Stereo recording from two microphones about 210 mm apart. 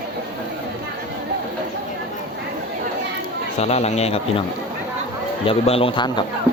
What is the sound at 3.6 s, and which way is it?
Speech, 30° left (ahead or behind).